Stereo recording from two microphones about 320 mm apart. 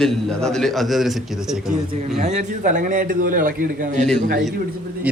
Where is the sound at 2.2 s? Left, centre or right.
Right.